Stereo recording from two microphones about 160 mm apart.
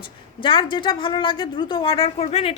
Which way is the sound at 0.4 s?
30° left (ahead or behind).